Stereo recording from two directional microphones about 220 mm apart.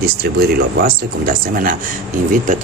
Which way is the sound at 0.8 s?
40° right (ahead or behind).